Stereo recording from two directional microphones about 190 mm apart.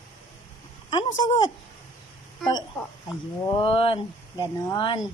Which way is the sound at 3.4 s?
25° left (ahead or behind).